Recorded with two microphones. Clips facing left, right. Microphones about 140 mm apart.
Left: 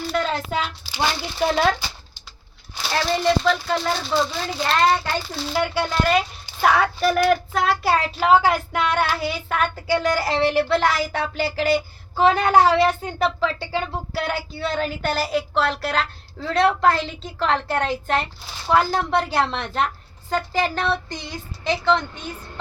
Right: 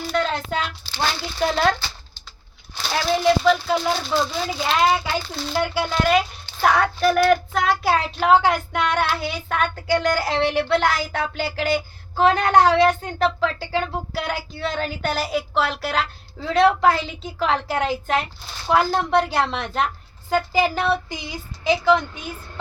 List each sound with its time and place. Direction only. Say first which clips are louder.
0.1 s speech: right 1 dB; centre (ahead or behind)
2.7 s child singing: right 1 dB; centre (ahead or behind)